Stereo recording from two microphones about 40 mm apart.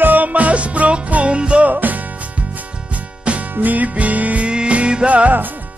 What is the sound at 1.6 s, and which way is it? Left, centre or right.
Music, right.